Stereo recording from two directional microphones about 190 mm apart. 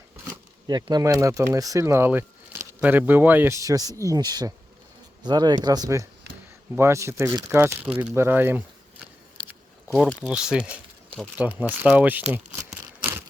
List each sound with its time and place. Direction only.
0.3 s speech: 20° right (ahead or behind)
9.9 s speech: centre (ahead or behind)
13.0 s tearing: 10° right (ahead or behind)